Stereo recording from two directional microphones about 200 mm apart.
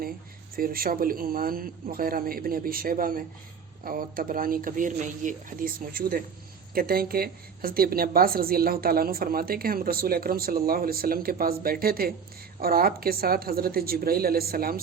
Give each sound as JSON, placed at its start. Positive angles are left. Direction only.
{"t": 0.5, "sound": "a woman's voice", "side_deg": -45}